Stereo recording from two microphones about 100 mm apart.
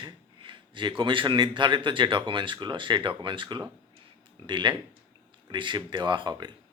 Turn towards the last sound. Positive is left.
turn(degrees=-45)  # may be behind; listen again after turning